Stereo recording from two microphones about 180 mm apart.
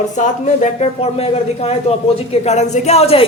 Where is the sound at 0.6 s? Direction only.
35° left (ahead or behind).